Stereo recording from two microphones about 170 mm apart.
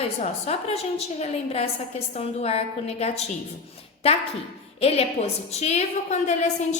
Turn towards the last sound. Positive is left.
turn(degrees=40)  # may be behind; listen again after turning